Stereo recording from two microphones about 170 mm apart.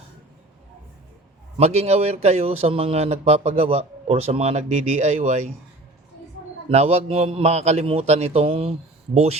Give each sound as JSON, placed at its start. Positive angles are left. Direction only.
{"t": 1.5, "sound": "a man's voice", "side_deg": -40}
{"t": 6.7, "sound": "a man's voice", "side_deg": -40}